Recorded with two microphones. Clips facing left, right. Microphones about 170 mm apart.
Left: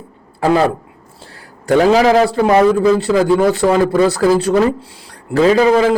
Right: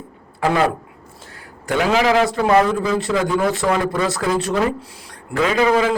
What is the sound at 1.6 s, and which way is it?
Speech, 35° left (ahead or behind).